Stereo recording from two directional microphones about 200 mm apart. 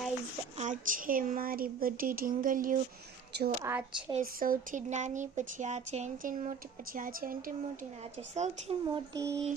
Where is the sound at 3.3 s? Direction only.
55° right (ahead or behind).